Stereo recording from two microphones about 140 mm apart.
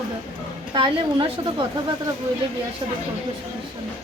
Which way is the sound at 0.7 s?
35° right (ahead or behind).